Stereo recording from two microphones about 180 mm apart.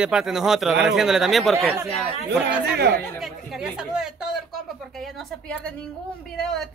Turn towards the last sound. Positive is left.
turn(degrees=5)  # may be behind; listen again after turning